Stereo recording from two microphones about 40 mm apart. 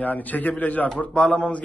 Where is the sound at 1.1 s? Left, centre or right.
Left.